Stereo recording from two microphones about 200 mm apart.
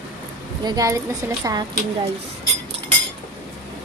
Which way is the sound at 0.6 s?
15° right (ahead or behind).